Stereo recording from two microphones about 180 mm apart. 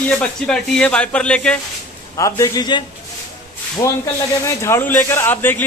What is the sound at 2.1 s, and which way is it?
Speech, 20° left (ahead or behind).